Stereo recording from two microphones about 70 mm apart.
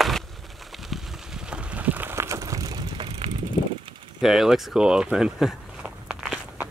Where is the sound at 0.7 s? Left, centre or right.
Centre; by 2.1 s right.